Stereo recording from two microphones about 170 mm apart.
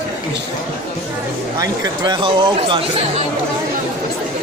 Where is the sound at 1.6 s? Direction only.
25° right (ahead or behind).